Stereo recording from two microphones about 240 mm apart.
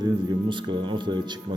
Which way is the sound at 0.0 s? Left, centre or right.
Centre.